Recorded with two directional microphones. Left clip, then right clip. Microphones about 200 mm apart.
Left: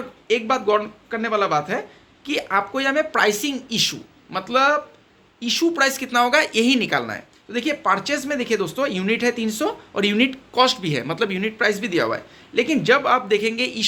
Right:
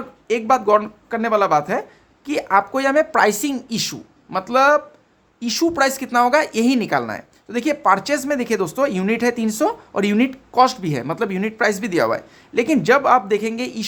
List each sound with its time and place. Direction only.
0.3 s speech: 40° right (ahead or behind)